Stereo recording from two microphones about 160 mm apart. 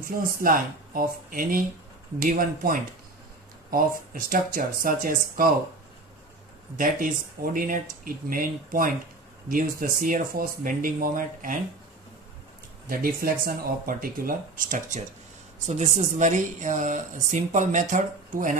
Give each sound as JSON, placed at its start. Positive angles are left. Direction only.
{"t": 0.4, "sound": "speech", "side_deg": -60}
{"t": 4.1, "sound": "speech", "side_deg": -60}
{"t": 6.8, "sound": "speech", "side_deg": -60}
{"t": 12.8, "sound": "a woman's voice", "side_deg": -65}